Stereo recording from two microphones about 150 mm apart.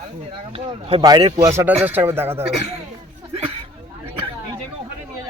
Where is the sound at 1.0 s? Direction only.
30° right (ahead or behind).